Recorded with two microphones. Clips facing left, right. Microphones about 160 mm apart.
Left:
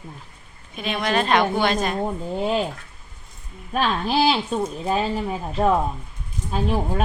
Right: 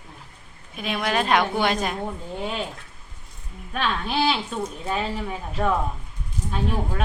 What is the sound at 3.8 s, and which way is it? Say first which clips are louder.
A woman's voice: left 4 dB; 35° left (ahead or behind).